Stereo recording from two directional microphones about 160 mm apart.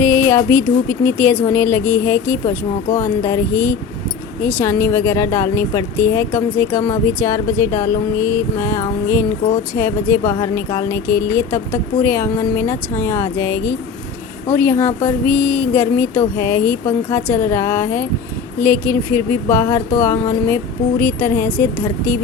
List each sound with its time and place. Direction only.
0.0 s speech: 15° left (ahead or behind)